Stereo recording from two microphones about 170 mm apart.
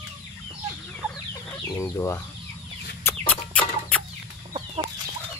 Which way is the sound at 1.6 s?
20° left (ahead or behind).